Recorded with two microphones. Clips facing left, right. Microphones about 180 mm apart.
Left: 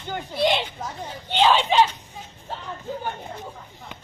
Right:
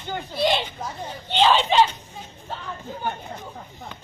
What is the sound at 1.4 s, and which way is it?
Speech, 5° left (ahead or behind).